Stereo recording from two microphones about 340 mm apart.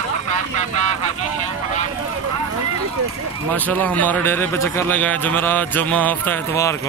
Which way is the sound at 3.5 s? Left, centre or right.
Centre.